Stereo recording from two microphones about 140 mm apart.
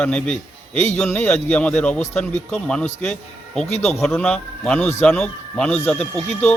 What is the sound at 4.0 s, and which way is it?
A man's voice, 5° left (ahead or behind).